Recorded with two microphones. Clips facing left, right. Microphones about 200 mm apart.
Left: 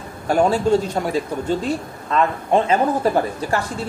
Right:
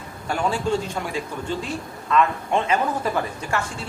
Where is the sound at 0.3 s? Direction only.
40° left (ahead or behind).